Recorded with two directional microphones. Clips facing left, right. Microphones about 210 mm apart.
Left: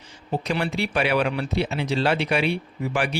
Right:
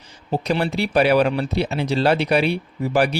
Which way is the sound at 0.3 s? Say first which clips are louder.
Right 4 dB; 35° right (ahead or behind).